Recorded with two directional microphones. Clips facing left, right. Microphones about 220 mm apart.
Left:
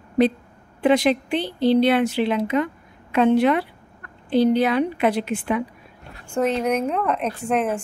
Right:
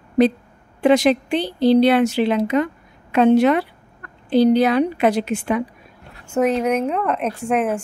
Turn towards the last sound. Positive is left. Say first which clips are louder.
# right 2 dB
turn(degrees=-5)  # may be behind; listen again after turning